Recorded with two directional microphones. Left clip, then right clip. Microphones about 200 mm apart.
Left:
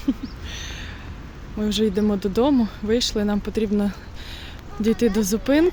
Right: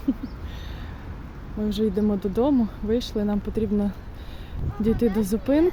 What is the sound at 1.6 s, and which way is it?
Speech, 5° right (ahead or behind).